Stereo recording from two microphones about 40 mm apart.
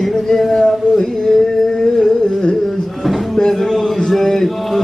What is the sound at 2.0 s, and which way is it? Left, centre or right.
Carnatic music, centre.